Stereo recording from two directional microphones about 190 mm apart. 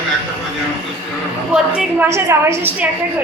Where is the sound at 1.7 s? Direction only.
10° right (ahead or behind).